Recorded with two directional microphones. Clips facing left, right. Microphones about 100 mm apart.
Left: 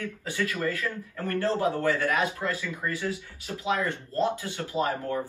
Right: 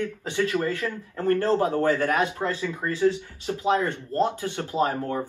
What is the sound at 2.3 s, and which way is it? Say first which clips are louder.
Speech: right 4 dB; 30° right (ahead or behind).